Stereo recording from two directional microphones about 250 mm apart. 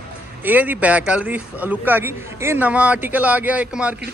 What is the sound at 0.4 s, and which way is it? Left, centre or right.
A man's voice, centre.